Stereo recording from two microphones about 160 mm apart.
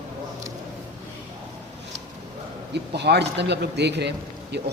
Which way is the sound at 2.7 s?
90° right.